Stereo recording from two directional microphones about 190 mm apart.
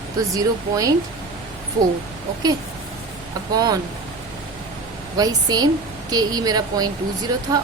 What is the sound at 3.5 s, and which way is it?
Speech, 20° right (ahead or behind).